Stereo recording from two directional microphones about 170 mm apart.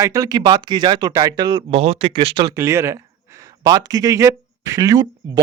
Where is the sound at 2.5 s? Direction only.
15° right (ahead or behind).